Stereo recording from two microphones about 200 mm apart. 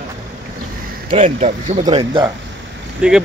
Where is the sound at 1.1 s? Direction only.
35° right (ahead or behind).